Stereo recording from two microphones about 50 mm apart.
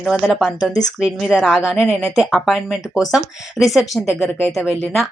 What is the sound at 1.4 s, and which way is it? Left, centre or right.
Speech, centre.